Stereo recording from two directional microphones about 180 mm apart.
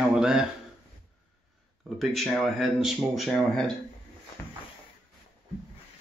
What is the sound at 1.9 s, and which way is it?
Speech, centre (ahead or behind).